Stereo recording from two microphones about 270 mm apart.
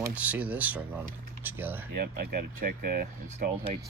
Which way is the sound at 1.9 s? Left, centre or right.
Right.